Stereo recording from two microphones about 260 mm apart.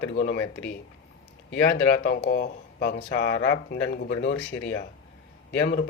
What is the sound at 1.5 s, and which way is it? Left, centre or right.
Speech, left.